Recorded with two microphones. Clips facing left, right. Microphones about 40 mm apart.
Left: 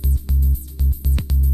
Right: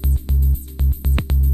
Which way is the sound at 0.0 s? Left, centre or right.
Right.